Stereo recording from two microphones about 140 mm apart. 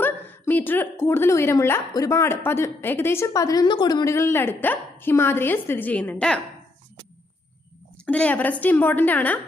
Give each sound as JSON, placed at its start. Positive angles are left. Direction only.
{"t": 0.0, "sound": "a woman's voice", "side_deg": 15}
{"t": 8.0, "sound": "a woman's voice", "side_deg": 10}